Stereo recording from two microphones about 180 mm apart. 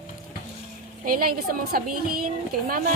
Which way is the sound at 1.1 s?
55° right (ahead or behind).